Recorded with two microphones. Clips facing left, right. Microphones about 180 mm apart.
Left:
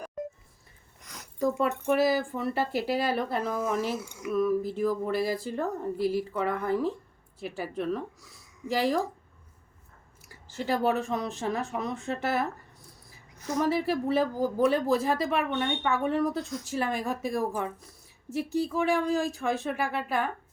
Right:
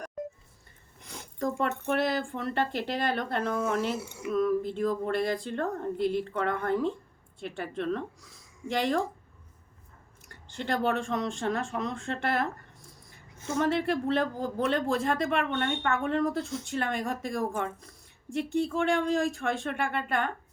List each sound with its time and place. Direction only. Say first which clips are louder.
1.0 s a sound: right 3 dB; 25° right (ahead or behind)
1.4 s a woman's voice: left 3 dB; 5° left (ahead or behind)
10.2 s a woman's voice: left 2 dB; 5° left (ahead or behind)
13.6 s a woman's voice: even; 5° left (ahead or behind)